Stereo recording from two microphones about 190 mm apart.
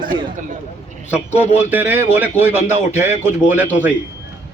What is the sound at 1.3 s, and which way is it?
Speech, 35° left (ahead or behind).